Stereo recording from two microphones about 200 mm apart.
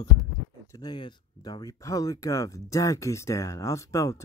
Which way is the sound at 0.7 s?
20° left (ahead or behind).